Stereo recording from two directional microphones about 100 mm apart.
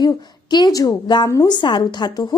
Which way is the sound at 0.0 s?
45° left (ahead or behind).